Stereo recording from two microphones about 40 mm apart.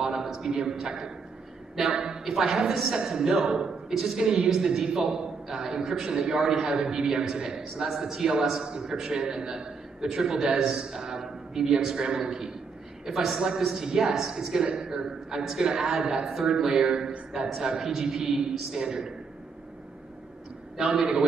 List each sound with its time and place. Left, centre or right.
0.0 s a sound: centre
0.3 s a man's voice: centre
13.4 s a man's voice: right
20.7 s a man's voice: centre